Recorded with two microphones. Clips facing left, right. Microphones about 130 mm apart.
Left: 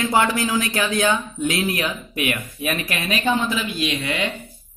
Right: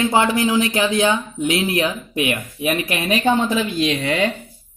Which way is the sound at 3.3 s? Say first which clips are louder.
Right 3 dB; 35° right (ahead or behind).